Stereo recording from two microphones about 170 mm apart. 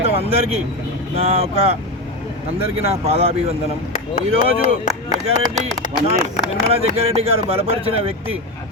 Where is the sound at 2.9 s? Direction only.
35° right (ahead or behind).